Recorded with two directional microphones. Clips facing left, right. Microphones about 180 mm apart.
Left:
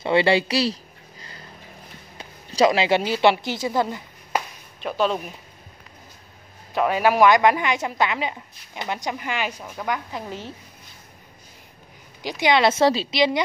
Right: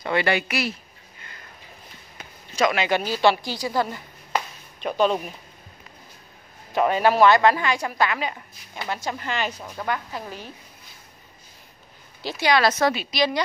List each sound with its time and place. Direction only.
0.0 s a woman's voice: 25° left (ahead or behind)
2.1 s a sound: 30° left (ahead or behind)
3.0 s a woman's voice: 20° left (ahead or behind)
4.8 s speech: centre (ahead or behind)
6.7 s a woman's voice: 5° left (ahead or behind)
12.2 s a woman's voice: 15° left (ahead or behind)